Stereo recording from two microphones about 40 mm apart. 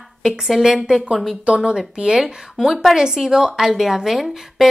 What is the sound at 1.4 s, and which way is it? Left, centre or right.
A woman's voice, right.